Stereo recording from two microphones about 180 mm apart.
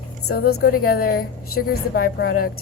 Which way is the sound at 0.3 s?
55° left (ahead or behind).